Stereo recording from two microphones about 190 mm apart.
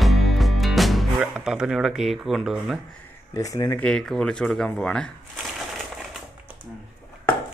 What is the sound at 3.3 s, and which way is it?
Speech, 15° left (ahead or behind).